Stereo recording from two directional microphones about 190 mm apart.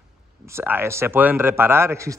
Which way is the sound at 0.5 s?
10° right (ahead or behind).